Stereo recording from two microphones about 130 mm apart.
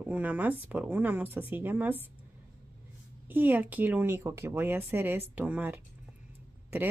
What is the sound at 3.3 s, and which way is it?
Speech, 15° right (ahead or behind).